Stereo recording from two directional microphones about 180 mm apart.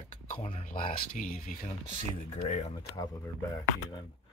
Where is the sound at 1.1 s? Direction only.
50° left (ahead or behind).